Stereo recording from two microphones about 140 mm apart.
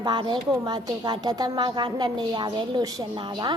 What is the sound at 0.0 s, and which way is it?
A woman's voice, 35° right (ahead or behind).